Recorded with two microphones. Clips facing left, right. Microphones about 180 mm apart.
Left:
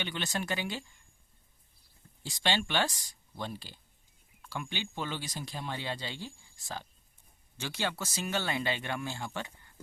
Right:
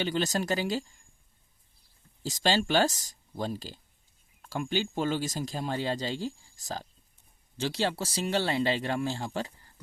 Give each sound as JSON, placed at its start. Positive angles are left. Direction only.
{"t": 0.0, "sound": "speech", "side_deg": -40}
{"t": 2.2, "sound": "speech", "side_deg": -40}